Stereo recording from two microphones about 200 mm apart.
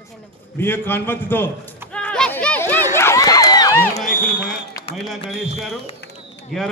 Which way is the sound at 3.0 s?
15° left (ahead or behind).